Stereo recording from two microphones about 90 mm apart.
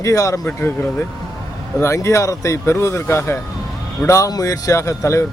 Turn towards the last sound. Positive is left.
turn(degrees=35)  # may be behind; listen again after turning